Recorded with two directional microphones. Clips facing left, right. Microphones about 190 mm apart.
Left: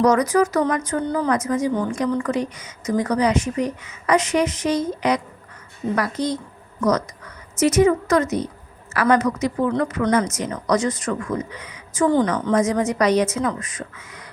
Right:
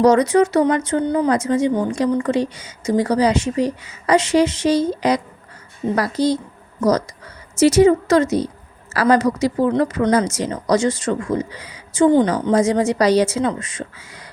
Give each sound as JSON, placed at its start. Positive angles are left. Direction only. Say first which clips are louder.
{"t": 0.0, "sound": "speech", "louder": "right 3 dB", "side_deg": -30}
{"t": 7.6, "sound": "speech", "louder": "right 4 dB", "side_deg": -30}